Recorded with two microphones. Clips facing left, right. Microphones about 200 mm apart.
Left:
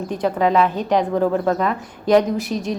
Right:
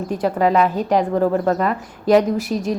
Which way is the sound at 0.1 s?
5° right (ahead or behind).